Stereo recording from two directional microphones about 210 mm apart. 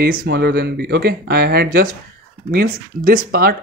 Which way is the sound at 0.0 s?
45° right (ahead or behind).